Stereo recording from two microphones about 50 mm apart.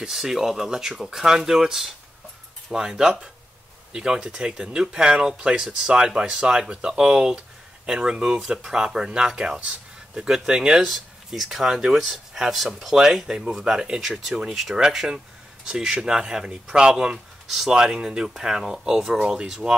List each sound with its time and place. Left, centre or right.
0.1 s speech: centre